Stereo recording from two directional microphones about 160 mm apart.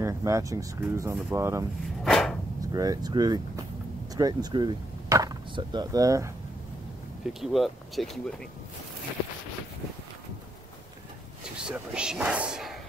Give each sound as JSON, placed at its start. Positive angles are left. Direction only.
{"t": 0.0, "sound": "speech", "side_deg": -20}
{"t": 2.0, "sound": "a sound", "side_deg": 0}
{"t": 2.7, "sound": "speech", "side_deg": -25}
{"t": 7.3, "sound": "speech", "side_deg": 0}
{"t": 11.5, "sound": "speech", "side_deg": -5}